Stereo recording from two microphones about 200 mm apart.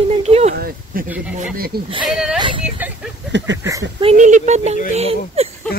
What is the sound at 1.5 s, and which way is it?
Speech, 50° right (ahead or behind).